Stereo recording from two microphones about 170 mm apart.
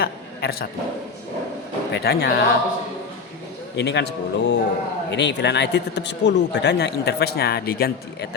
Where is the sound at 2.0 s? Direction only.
75° left (ahead or behind).